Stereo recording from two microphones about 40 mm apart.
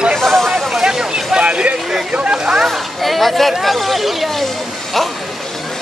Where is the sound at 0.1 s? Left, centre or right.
Centre.